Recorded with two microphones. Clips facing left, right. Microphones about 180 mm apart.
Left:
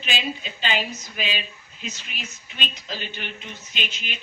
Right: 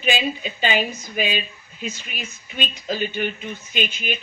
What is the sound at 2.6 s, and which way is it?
Speech, 50° right (ahead or behind).